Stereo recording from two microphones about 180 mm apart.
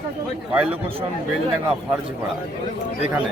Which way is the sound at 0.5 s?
10° right (ahead or behind).